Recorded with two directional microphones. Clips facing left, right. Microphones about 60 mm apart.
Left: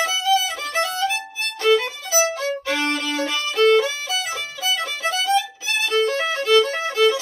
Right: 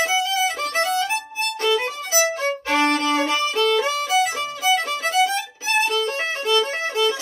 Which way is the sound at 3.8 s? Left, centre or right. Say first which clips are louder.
Right 5 dB; right.